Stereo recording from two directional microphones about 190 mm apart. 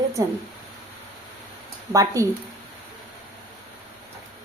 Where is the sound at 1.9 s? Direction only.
15° right (ahead or behind).